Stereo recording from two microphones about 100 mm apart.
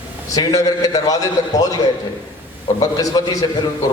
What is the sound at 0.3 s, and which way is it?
A man's voice, 35° left (ahead or behind).